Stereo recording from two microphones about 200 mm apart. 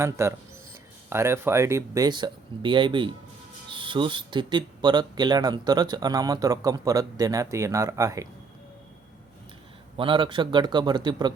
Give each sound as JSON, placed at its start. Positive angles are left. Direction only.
{"t": 0.0, "sound": "speech", "side_deg": -15}
{"t": 10.0, "sound": "speech", "side_deg": -25}